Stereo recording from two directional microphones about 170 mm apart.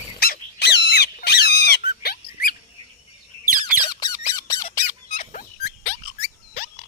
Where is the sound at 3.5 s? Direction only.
25° left (ahead or behind).